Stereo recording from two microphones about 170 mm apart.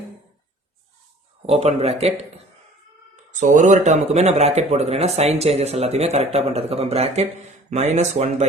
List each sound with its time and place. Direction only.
1.4 s speech: 40° right (ahead or behind)
3.4 s speech: 45° right (ahead or behind)